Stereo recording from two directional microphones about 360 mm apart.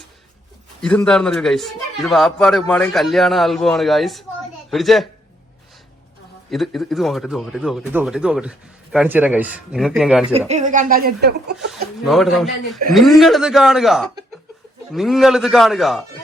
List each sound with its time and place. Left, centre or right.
0.8 s speech: centre
6.5 s speech: centre
10.5 s speech: right
11.5 s speech: centre